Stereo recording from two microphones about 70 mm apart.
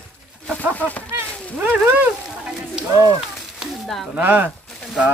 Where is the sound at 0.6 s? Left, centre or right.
Left.